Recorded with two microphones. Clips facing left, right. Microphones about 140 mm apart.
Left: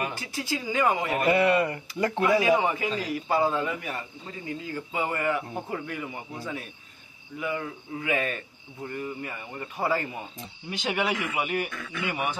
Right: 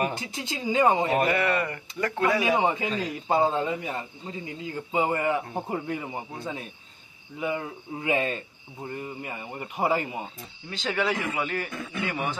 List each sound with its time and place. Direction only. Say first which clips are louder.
0.1 s speech: left 2 dB; 20° right (ahead or behind)
1.3 s speech: left 3 dB; 30° left (ahead or behind)
2.4 s speech: left 1 dB; 25° right (ahead or behind)
10.7 s speech: even; 15° left (ahead or behind)
11.7 s speech: right 3 dB; 30° right (ahead or behind)